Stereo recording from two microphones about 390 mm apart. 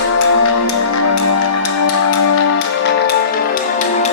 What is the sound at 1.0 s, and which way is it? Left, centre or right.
Music, left.